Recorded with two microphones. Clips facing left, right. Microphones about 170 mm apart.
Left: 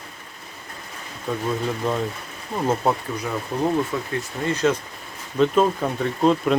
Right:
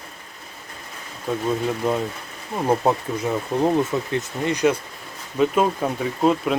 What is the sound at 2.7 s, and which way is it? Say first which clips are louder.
Speech: right 3 dB; 20° right (ahead or behind).